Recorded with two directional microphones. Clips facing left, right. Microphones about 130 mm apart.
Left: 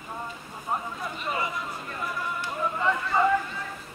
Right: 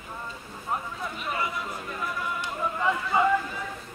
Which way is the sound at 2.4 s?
10° right (ahead or behind).